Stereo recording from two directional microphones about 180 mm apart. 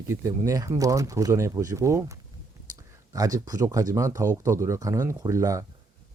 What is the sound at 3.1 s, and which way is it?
Speech, 20° right (ahead or behind).